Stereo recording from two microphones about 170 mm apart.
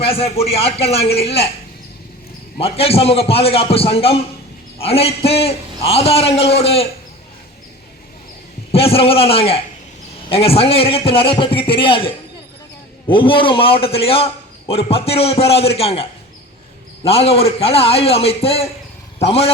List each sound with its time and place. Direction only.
0.0 s a man's voice: 35° left (ahead or behind)
2.6 s a man's voice: 35° left (ahead or behind)
8.7 s a man's voice: 35° left (ahead or behind)
17.1 s a man's voice: 35° left (ahead or behind)